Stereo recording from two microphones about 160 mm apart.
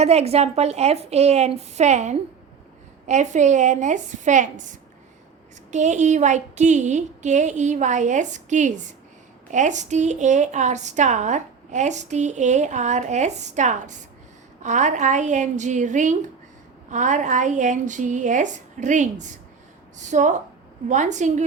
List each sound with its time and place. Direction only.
0.0 s a woman's voice: 40° right (ahead or behind)
5.7 s a woman's voice: 45° right (ahead or behind)